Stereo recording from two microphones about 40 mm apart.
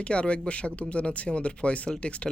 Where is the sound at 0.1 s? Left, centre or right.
Left.